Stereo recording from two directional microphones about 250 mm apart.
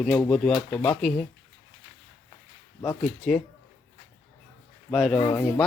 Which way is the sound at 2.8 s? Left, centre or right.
Centre.